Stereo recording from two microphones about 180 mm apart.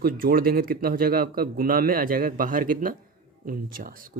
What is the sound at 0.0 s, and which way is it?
Speech, 55° right (ahead or behind).